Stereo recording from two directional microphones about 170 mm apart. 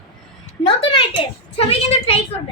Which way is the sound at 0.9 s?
30° left (ahead or behind).